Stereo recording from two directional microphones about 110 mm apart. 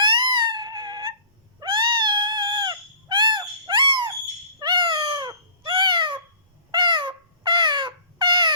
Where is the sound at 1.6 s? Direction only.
45° right (ahead or behind).